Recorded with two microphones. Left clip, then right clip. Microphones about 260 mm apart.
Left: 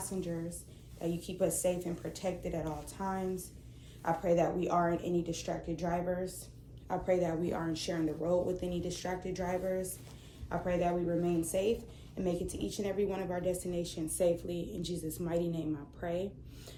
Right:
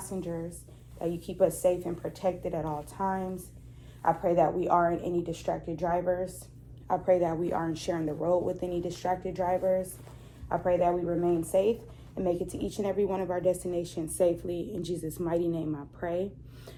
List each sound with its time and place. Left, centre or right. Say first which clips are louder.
0.0 s speech: right 3 dB; centre